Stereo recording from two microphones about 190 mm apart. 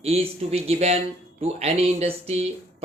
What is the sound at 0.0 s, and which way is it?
Speech, 30° right (ahead or behind).